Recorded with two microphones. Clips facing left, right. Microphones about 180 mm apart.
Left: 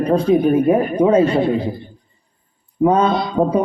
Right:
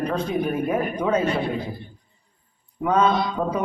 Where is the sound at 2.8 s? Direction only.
30° left (ahead or behind).